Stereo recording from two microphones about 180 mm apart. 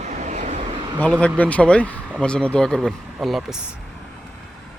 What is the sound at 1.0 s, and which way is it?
Speech, 5° left (ahead or behind).